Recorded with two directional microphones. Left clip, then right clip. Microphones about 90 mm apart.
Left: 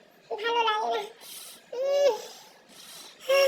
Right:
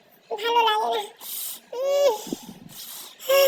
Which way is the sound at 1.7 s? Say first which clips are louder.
Right 3 dB; 20° right (ahead or behind).